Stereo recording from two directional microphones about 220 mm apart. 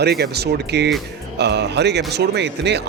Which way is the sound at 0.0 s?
45° right (ahead or behind).